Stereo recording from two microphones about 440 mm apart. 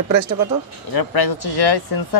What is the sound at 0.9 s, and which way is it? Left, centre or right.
Speech, left.